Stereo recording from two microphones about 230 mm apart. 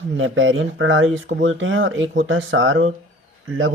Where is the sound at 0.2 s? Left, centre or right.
Right.